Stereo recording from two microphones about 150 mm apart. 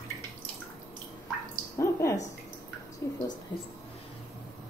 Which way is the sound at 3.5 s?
25° left (ahead or behind).